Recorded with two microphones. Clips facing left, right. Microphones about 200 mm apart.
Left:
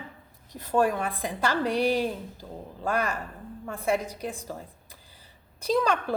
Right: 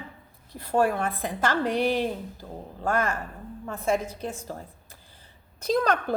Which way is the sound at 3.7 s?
15° left (ahead or behind).